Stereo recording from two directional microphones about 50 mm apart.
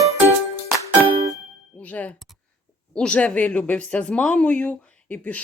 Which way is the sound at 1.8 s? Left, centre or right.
Left.